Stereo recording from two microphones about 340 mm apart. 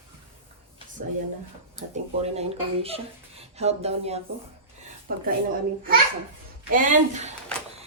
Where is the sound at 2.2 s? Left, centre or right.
Centre.